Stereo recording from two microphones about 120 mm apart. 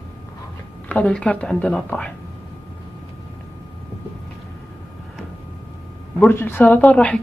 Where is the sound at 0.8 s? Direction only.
10° left (ahead or behind).